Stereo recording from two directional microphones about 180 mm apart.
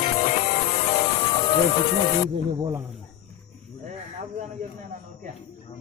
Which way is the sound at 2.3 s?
20° right (ahead or behind).